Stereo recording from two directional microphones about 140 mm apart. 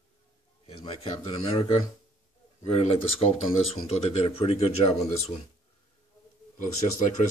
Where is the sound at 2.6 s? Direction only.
50° left (ahead or behind).